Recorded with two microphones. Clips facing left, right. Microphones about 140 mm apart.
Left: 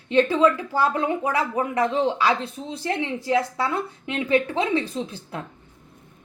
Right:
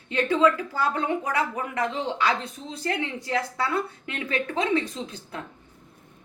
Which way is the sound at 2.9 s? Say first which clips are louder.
Left 4 dB; 25° left (ahead or behind).